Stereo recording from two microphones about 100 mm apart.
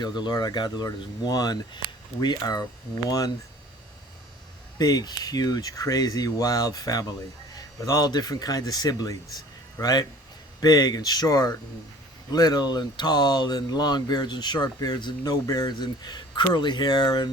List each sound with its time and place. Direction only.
0.0 s speech: 45° left (ahead or behind)
4.8 s speech: 40° left (ahead or behind)